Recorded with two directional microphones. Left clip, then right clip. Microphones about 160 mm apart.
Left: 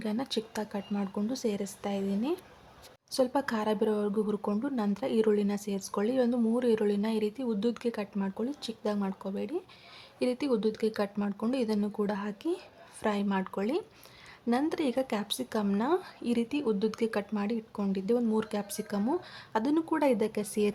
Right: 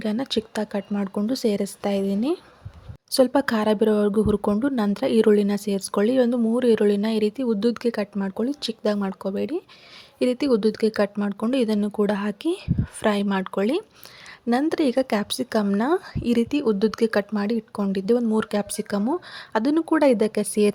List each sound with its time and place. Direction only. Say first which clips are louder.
0.0 s speech: right 8 dB; 30° right (ahead or behind)